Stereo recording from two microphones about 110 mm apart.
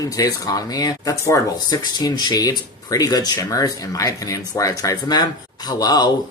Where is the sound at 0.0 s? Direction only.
35° left (ahead or behind).